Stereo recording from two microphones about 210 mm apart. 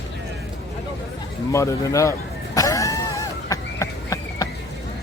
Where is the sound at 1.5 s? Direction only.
15° left (ahead or behind).